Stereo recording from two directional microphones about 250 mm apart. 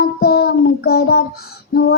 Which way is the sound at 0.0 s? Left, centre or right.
Left.